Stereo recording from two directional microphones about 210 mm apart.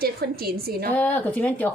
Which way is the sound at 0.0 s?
45° right (ahead or behind).